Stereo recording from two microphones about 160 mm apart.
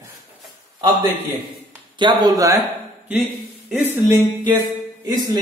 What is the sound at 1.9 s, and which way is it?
Speech, 25° right (ahead or behind).